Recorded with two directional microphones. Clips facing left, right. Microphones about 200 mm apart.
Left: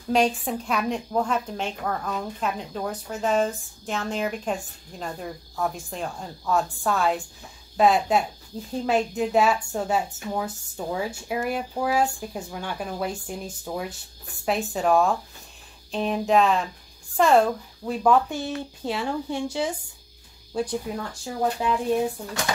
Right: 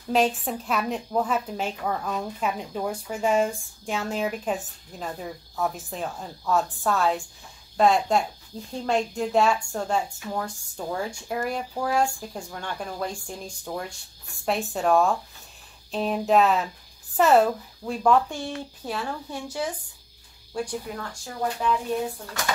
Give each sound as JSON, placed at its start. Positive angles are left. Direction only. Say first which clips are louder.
{"t": 0.1, "sound": "a woman's voice", "louder": "left 1 dB", "side_deg": 0}
{"t": 20.9, "sound": "speech", "louder": "left 4 dB", "side_deg": 20}